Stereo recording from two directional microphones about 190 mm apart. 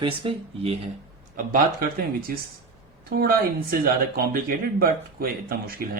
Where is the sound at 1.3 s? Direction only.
50° right (ahead or behind).